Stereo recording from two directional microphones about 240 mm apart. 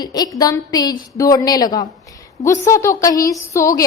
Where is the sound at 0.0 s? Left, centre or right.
Centre.